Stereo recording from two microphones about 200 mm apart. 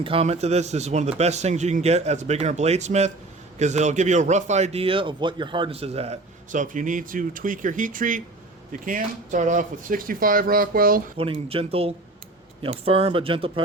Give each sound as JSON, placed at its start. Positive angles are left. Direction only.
{"t": 0.0, "sound": "a man's voice", "side_deg": -30}
{"t": 11.2, "sound": "speech", "side_deg": -30}